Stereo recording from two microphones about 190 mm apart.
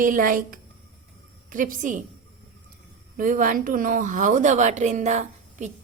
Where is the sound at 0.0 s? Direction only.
45° right (ahead or behind).